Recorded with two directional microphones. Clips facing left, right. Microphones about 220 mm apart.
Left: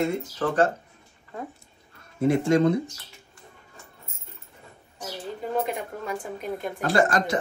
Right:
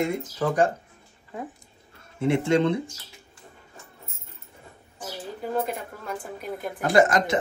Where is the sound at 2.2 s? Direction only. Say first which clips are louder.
Left 1 dB; 25° right (ahead or behind).